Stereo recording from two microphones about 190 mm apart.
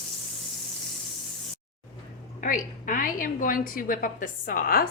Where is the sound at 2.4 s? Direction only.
45° left (ahead or behind).